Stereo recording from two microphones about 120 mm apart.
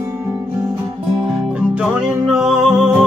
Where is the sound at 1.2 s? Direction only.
10° right (ahead or behind).